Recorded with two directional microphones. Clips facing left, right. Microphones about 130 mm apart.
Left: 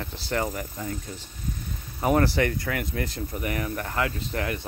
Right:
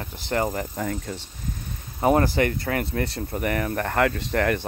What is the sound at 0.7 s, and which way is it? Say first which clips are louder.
Speech: right 5 dB; 90° right.